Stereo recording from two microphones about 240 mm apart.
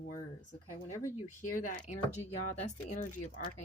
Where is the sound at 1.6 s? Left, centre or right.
Left.